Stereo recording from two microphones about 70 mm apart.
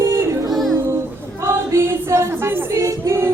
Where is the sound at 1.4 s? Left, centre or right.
Right.